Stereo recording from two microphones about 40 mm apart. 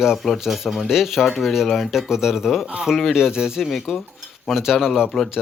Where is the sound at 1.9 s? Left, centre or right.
Centre.